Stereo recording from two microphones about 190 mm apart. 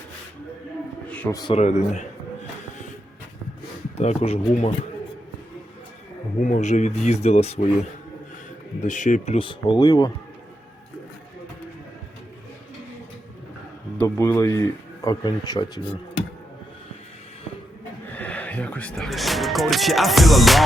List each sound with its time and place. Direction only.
1.0 s a sound: 5° left (ahead or behind)
1.4 s a man's voice: 25° left (ahead or behind)
1.6 s speech: 40° left (ahead or behind)
3.9 s speech: 35° left (ahead or behind)
6.4 s speech: 40° left (ahead or behind)
8.8 s speech: 40° left (ahead or behind); by 10.1 s 20° left (ahead or behind)
14.0 s a man's voice: 15° left (ahead or behind)
18.1 s speech: 10° left (ahead or behind)